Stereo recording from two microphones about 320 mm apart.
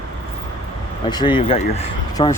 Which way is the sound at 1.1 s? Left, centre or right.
Centre.